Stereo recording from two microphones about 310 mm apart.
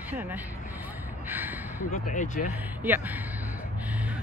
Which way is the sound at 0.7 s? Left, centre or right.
Centre.